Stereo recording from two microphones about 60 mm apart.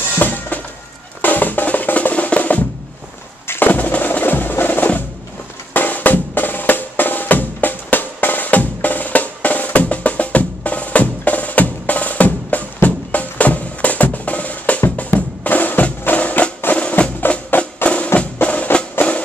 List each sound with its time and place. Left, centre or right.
0.2 s music: left
1.2 s drum: left
3.4 s percussion: left
15.1 s music: left